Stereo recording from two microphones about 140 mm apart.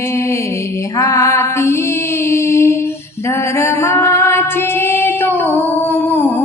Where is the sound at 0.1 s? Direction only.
20° left (ahead or behind).